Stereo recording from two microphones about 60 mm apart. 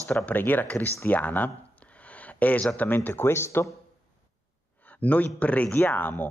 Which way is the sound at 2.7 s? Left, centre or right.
Left.